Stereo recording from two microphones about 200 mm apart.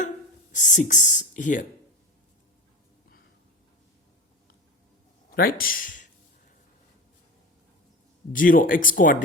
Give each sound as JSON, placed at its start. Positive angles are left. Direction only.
{"t": 0.5, "sound": "speech", "side_deg": 40}
{"t": 5.3, "sound": "speech", "side_deg": 50}
{"t": 8.3, "sound": "speech", "side_deg": 40}